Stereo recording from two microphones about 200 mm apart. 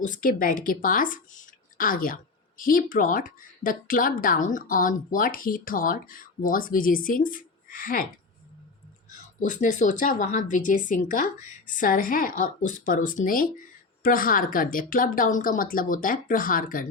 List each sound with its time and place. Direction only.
0.0 s speech: 40° left (ahead or behind)
9.4 s speech: 40° left (ahead or behind)